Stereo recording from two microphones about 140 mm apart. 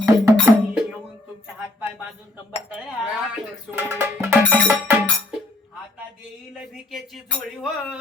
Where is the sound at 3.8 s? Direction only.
15° right (ahead or behind).